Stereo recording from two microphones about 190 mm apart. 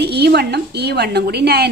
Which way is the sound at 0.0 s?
60° right (ahead or behind).